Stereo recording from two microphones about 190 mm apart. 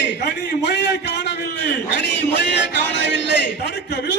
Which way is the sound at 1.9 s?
65° left (ahead or behind).